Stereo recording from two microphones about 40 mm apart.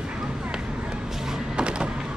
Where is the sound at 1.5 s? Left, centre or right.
Right.